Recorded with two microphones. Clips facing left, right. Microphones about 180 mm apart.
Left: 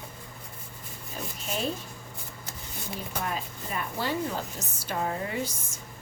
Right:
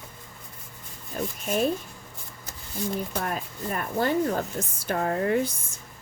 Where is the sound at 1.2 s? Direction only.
55° right (ahead or behind).